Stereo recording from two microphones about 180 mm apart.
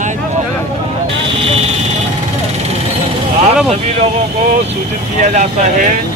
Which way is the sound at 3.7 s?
35° right (ahead or behind).